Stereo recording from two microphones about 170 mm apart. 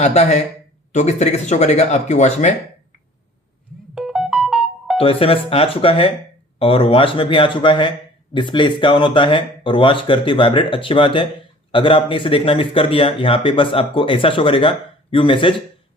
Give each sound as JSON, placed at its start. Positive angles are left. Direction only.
{"t": 0.0, "sound": "speech", "side_deg": 40}
{"t": 3.9, "sound": "music", "side_deg": 0}
{"t": 4.9, "sound": "speech", "side_deg": 35}